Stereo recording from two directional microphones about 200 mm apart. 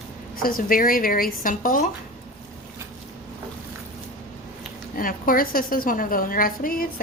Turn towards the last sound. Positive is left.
turn(degrees=45)  # may be behind; listen again after turning